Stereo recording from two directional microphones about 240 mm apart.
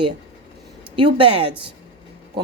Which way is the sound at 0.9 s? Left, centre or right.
Right.